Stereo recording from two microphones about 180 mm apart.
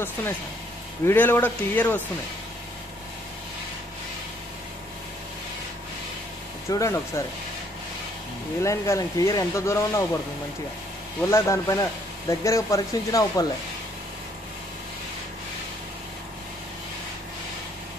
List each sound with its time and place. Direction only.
1.0 s speech: 10° left (ahead or behind)
6.7 s speech: 15° left (ahead or behind)
8.6 s speech: 15° left (ahead or behind)
11.2 s speech: 15° left (ahead or behind)